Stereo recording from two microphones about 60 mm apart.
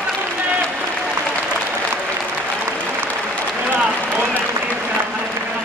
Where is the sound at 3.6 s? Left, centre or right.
Right.